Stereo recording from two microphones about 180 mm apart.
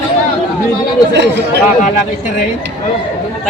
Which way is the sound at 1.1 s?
70° right (ahead or behind).